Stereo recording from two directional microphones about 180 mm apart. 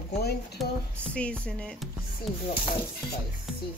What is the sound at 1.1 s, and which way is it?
Music, 5° left (ahead or behind).